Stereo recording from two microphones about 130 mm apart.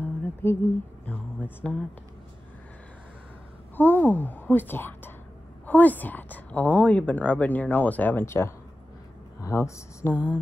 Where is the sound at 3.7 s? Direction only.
15° left (ahead or behind).